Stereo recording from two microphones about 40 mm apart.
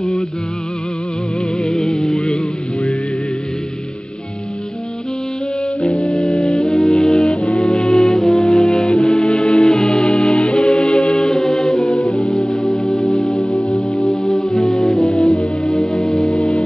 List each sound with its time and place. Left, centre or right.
1.6 s music: centre
5.8 s music: left